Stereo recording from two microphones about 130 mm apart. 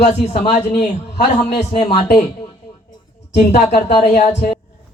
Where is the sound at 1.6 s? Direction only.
55° left (ahead or behind).